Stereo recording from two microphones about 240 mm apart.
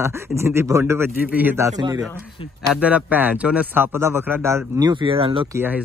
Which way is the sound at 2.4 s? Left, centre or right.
Left.